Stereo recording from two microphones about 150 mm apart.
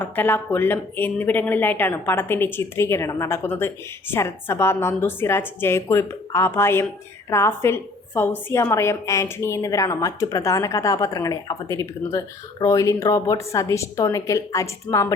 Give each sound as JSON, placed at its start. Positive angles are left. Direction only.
{"t": 0.0, "sound": "a woman's voice", "side_deg": 10}